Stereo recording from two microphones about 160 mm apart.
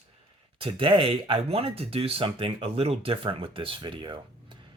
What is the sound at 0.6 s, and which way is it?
Speech, 35° right (ahead or behind).